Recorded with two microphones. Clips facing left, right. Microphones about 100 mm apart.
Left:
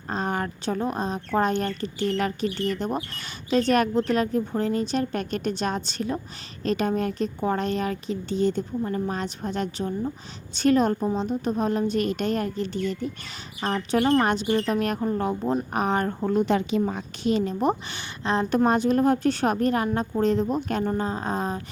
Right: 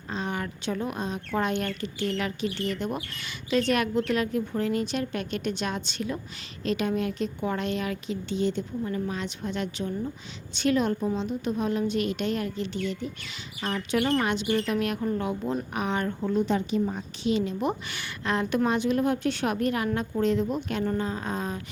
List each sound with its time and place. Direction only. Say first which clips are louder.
0.1 s speech: left 4 dB; 45° left (ahead or behind)
16.5 s a woman's voice: left 3 dB; 90° left
17.2 s speech: left 3 dB; 40° left (ahead or behind)